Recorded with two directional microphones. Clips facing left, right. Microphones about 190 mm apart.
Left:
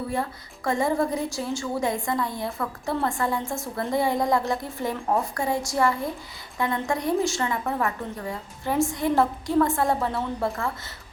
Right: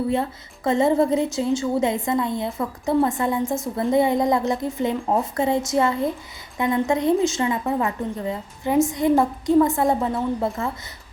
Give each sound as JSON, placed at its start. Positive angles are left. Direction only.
{"t": 0.1, "sound": "a woman's voice", "side_deg": -20}